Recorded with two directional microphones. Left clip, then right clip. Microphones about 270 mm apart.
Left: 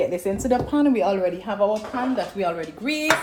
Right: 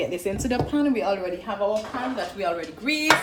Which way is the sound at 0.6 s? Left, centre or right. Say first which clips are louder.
Left 1 dB; left.